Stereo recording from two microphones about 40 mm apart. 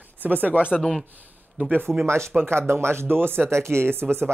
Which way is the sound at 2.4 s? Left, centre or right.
Right.